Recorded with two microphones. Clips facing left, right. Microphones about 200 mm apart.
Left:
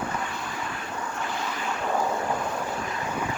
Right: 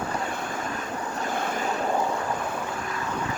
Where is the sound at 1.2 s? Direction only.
50° right (ahead or behind).